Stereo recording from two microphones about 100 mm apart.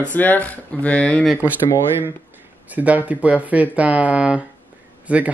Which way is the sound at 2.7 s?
15° right (ahead or behind).